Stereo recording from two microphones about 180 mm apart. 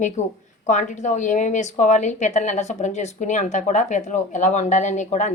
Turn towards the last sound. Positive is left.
turn(degrees=40)  # may be behind; listen again after turning